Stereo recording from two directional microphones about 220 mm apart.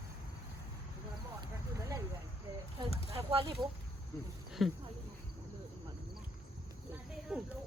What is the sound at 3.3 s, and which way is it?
Speech, 25° right (ahead or behind).